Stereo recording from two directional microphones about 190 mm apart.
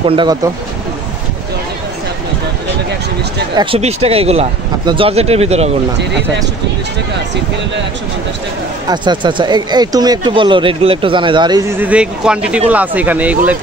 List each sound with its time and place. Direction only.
0.0 s speech: 25° right (ahead or behind)
3.5 s speech: 30° right (ahead or behind)
8.8 s speech: 25° right (ahead or behind)
11.7 s speech: 10° right (ahead or behind)